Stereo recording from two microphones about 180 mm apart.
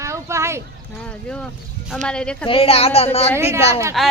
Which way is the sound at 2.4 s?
30° left (ahead or behind).